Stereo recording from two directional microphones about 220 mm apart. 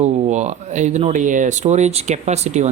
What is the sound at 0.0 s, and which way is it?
Speech, 30° right (ahead or behind).